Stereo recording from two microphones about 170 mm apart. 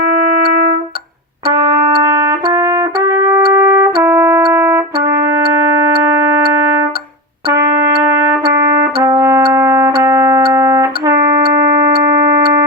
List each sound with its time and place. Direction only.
0.1 s trumpet: 65° right (ahead or behind)
2.0 s trumpet: 20° right (ahead or behind)
4.5 s brass instrument: 15° right (ahead or behind)
7.5 s music: 20° right (ahead or behind)
8.5 s trumpet: 20° right (ahead or behind)
9.0 s brass instrument: 20° right (ahead or behind)
9.5 s music: 15° right (ahead or behind)